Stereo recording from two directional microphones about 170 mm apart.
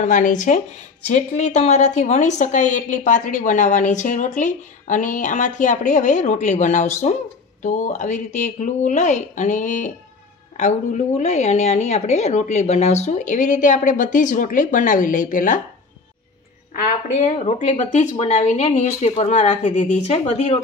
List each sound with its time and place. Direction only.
0.0 s speech: 50° left (ahead or behind)
16.8 s speech: 45° left (ahead or behind)